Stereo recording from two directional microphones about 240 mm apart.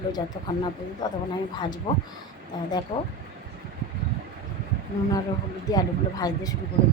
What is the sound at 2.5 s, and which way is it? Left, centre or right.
Speech, centre.